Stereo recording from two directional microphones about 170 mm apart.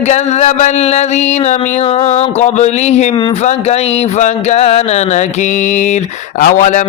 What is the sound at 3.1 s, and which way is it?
Speech, 30° left (ahead or behind).